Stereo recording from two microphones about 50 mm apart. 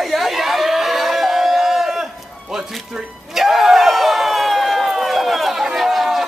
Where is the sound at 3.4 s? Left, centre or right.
Centre.